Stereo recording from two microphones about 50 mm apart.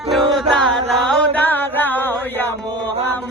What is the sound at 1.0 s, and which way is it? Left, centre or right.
Carnatic music, centre.